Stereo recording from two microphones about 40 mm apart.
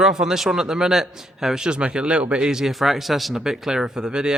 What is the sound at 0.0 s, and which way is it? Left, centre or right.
A man's voice, centre.